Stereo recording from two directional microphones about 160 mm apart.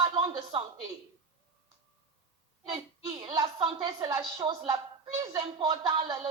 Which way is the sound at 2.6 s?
25° right (ahead or behind).